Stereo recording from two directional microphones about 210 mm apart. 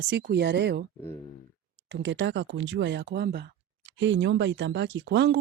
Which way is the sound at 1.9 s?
60° right (ahead or behind).